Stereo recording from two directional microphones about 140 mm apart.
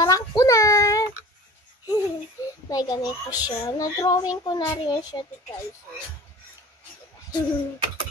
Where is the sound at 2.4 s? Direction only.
25° left (ahead or behind).